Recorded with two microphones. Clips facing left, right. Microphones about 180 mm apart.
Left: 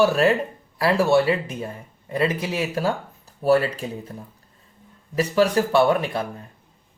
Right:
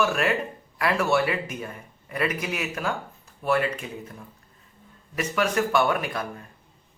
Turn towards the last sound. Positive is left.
turn(degrees=30)  # may be behind; listen again after turning